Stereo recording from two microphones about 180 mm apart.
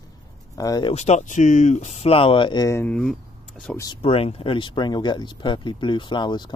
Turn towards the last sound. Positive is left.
turn(degrees=25)  # may be behind; listen again after turning